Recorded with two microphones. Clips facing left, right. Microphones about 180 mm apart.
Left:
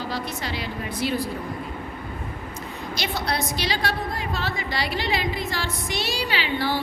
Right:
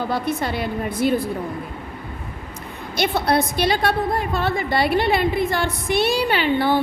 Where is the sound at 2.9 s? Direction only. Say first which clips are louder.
Right 8 dB; 55° right (ahead or behind).